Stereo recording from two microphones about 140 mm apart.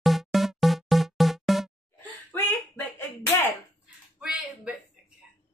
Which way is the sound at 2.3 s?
15° left (ahead or behind).